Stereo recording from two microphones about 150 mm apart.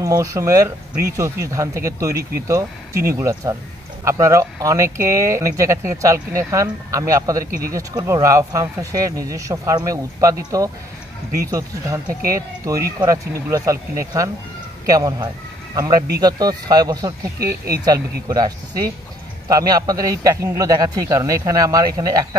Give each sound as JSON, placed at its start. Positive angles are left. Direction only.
{"t": 0.0, "sound": "speech", "side_deg": -20}
{"t": 17.4, "sound": "speech", "side_deg": -90}
{"t": 18.3, "sound": "speech", "side_deg": -25}